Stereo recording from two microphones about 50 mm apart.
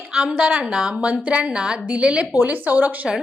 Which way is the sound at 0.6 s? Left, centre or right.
Centre.